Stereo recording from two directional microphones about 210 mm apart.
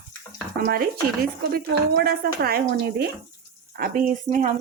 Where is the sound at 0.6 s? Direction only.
45° right (ahead or behind).